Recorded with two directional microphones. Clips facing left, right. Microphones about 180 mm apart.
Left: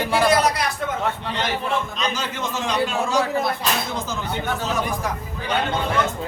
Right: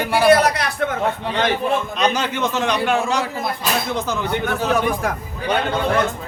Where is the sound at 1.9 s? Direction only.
65° right (ahead or behind).